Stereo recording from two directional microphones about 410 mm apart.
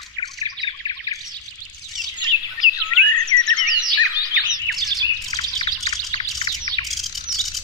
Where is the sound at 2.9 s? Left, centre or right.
Left.